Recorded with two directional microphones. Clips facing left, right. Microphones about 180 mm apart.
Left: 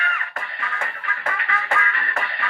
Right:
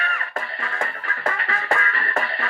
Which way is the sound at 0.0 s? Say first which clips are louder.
Right 1 dB; 35° right (ahead or behind).